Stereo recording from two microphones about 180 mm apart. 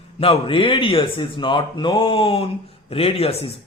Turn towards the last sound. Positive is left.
turn(degrees=35)  # may be behind; listen again after turning